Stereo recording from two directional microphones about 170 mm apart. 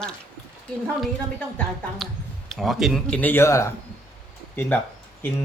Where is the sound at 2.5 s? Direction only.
Centre (ahead or behind); by 3.7 s 15° left (ahead or behind).